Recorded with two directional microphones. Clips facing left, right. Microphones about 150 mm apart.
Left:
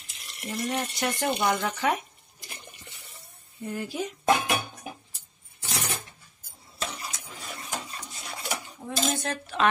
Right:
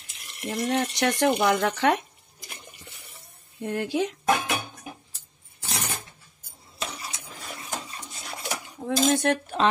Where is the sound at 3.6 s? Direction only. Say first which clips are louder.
Right 6 dB; 90° right.